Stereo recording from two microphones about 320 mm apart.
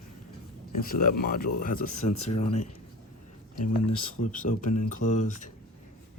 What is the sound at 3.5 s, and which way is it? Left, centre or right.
Speech, left.